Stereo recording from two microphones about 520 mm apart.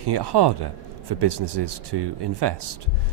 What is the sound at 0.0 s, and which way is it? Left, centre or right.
Speech, right.